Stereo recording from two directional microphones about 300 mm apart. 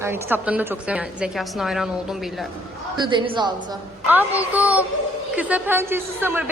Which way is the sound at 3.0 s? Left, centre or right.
Centre.